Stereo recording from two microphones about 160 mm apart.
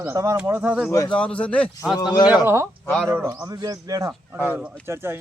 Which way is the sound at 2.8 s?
5° left (ahead or behind).